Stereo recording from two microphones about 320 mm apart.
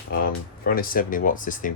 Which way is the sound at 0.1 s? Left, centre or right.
Left.